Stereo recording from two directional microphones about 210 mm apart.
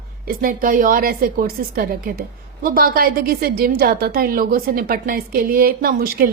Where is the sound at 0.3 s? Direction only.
40° right (ahead or behind).